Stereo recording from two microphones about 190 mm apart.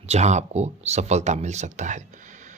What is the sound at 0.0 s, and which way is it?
A man's voice, 35° right (ahead or behind).